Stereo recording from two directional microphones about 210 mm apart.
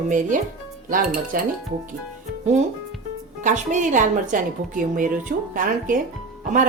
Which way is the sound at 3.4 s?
35° right (ahead or behind).